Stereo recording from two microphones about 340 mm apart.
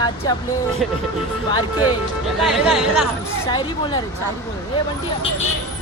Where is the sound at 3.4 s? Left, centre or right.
Centre.